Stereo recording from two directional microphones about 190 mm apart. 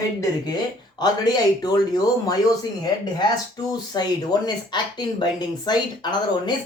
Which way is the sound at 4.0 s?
20° left (ahead or behind).